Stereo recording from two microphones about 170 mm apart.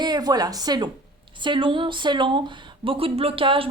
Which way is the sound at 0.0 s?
25° right (ahead or behind).